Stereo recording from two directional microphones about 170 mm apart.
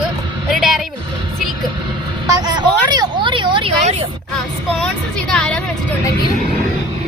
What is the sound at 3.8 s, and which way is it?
Speech, 40° right (ahead or behind).